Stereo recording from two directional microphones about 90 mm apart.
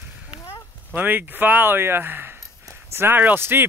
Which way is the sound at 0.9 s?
20° right (ahead or behind).